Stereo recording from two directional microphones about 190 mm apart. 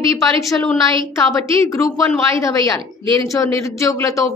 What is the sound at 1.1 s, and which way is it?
A woman's voice, 15° left (ahead or behind).